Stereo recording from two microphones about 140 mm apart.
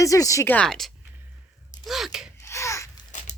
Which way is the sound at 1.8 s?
Centre (ahead or behind).